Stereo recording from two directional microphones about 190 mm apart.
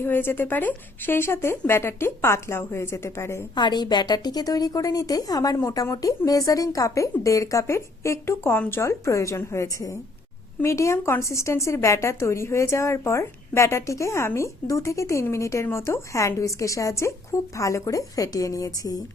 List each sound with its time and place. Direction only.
0.0 s a woman's voice: 10° left (ahead or behind)